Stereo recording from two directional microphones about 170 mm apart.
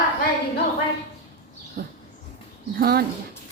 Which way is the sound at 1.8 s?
55° right (ahead or behind).